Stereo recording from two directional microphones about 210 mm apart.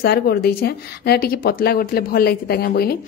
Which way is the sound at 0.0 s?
45° left (ahead or behind).